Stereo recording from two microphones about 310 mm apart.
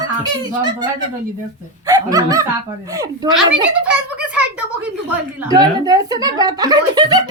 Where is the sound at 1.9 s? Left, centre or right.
Centre.